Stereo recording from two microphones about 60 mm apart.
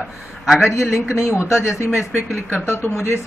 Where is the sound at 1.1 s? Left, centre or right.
Left.